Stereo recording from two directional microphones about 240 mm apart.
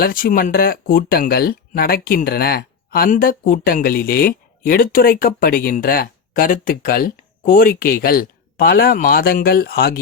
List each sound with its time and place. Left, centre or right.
0.0 s speech: left